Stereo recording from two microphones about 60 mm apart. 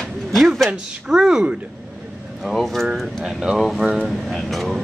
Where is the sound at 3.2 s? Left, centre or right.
Centre.